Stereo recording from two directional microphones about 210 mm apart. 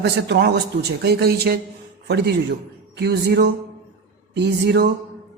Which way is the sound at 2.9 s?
50° right (ahead or behind).